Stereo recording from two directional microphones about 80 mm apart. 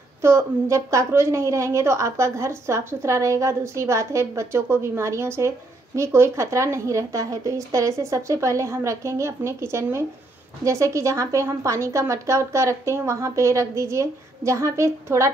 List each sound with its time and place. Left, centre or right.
0.2 s a woman's voice: right